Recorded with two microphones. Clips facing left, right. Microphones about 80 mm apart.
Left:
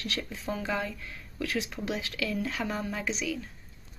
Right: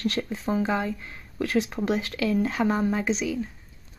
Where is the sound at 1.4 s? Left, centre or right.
Right.